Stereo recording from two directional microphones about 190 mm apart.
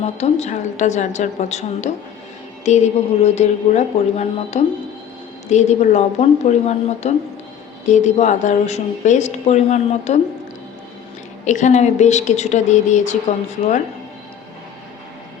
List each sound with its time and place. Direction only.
0.0 s speech: 35° left (ahead or behind)
11.4 s speech: 40° left (ahead or behind)